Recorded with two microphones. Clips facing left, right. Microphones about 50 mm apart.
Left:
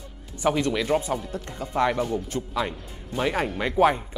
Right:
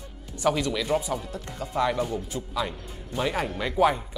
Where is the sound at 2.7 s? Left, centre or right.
Centre.